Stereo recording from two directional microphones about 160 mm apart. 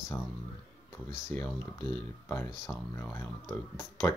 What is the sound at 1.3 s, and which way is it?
Speech, 5° left (ahead or behind).